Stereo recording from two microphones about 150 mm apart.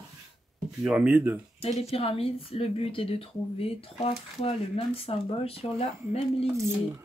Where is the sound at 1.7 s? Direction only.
40° left (ahead or behind).